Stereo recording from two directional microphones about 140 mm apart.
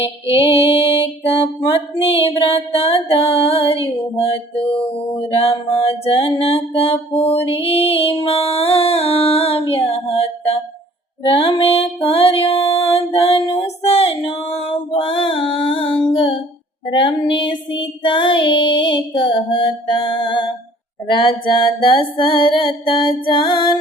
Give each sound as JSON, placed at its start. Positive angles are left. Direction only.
{"t": 0.0, "sound": "child singing", "side_deg": 40}
{"t": 0.7, "sound": "music", "side_deg": 40}
{"t": 5.3, "sound": "music", "side_deg": 45}
{"t": 14.3, "sound": "child singing", "side_deg": 35}